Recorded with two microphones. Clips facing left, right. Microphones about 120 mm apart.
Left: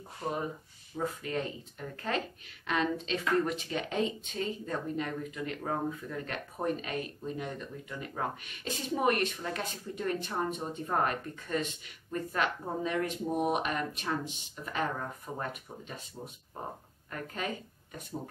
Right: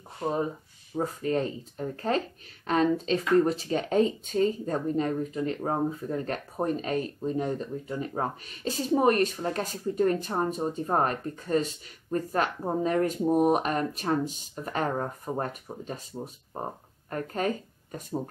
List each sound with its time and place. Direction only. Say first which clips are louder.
0.2 s speech: right 6 dB; 30° right (ahead or behind)